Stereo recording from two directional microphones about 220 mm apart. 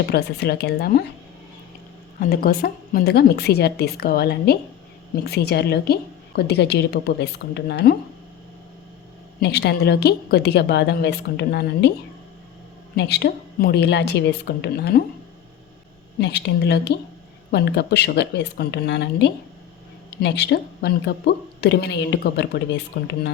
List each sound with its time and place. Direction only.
0.1 s a woman's voice: 45° left (ahead or behind)
2.2 s a woman's voice: 40° left (ahead or behind)
9.4 s a woman's voice: 50° left (ahead or behind)
13.0 s a woman's voice: 50° left (ahead or behind)
16.2 s a woman's voice: 50° left (ahead or behind)